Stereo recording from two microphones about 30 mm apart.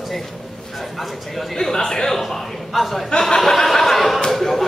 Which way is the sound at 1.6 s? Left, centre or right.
Centre.